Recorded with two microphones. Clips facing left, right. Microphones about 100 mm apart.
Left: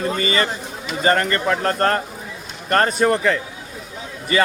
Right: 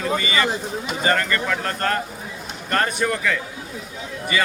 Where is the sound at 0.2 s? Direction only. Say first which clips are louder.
Left 1 dB; 40° left (ahead or behind).